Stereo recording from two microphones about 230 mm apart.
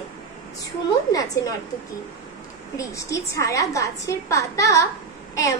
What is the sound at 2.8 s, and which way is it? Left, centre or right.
A woman's voice, centre.